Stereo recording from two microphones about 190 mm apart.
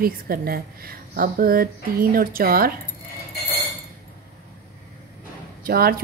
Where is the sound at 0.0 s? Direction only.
50° right (ahead or behind).